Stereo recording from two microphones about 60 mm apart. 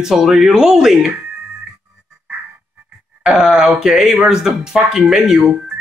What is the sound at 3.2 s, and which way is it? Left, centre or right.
Speech, centre.